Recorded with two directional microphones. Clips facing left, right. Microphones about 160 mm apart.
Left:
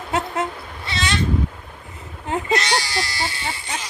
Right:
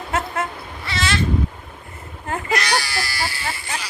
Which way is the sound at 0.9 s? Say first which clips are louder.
Right 1 dB; 20° left (ahead or behind).